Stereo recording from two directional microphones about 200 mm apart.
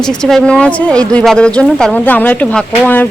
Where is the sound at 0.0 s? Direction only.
5° left (ahead or behind).